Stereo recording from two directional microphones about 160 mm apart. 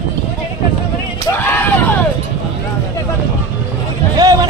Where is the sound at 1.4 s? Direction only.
15° left (ahead or behind).